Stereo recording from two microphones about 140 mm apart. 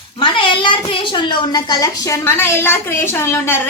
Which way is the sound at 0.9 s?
35° left (ahead or behind).